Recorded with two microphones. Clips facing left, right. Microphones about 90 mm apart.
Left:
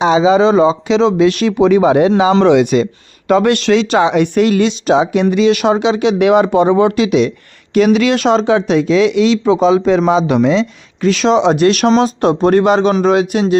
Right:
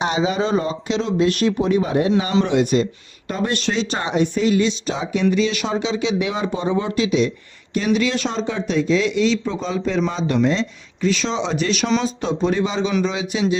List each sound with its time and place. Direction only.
0.3 s speech: 90° left; by 13.6 s 60° left (ahead or behind)